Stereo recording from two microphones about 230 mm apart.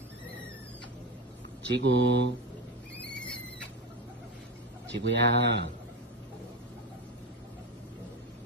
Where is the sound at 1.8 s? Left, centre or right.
Right.